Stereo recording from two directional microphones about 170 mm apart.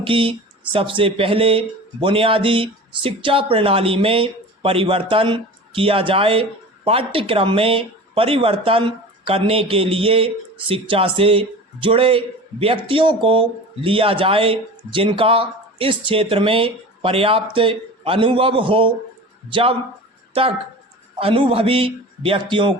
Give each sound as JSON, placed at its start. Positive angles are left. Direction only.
{"t": 0.0, "sound": "speech", "side_deg": -30}
{"t": 21.2, "sound": "speech", "side_deg": -35}